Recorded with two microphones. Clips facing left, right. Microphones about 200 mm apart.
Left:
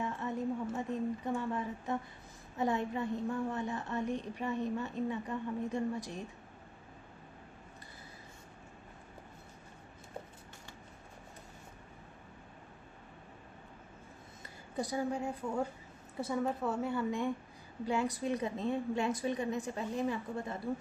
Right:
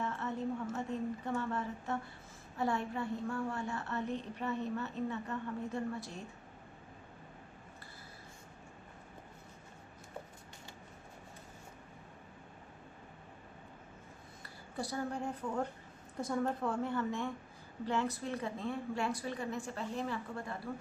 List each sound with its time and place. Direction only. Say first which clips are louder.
0.0 s a sound: left 1 dB; 15° left (ahead or behind)
2.6 s a woman's voice: left 2 dB; 20° left (ahead or behind)
14.4 s a woman's voice: left 3 dB; 15° left (ahead or behind)